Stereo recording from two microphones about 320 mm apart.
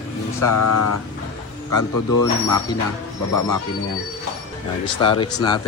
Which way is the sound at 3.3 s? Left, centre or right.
Left.